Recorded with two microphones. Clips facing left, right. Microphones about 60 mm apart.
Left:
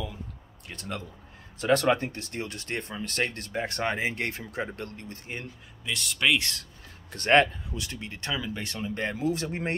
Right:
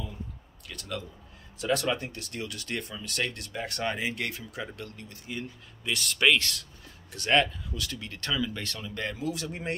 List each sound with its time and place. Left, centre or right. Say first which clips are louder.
0.7 s speech: left 1 dB; left
5.9 s speech: right 2 dB; centre
6.4 s speech: even; left
7.7 s speech: even; left